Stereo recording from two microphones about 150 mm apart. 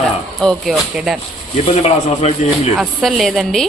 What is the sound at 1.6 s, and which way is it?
Speech, 45° left (ahead or behind).